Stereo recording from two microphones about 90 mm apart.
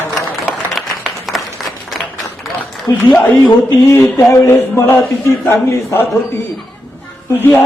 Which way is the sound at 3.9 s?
35° left (ahead or behind).